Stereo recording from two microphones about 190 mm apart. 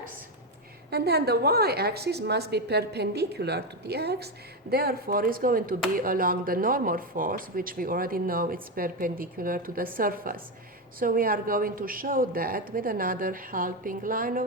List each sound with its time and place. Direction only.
0.9 s a woman's voice: 60° right (ahead or behind)